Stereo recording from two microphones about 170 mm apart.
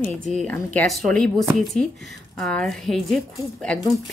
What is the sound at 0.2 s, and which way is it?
Speech, 45° right (ahead or behind).